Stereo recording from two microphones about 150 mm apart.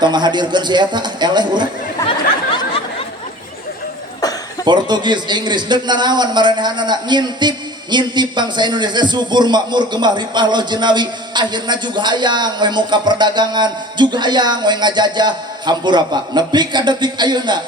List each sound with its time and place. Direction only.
0.0 s a man's voice: 30° right (ahead or behind)
4.6 s a man's voice: 30° right (ahead or behind)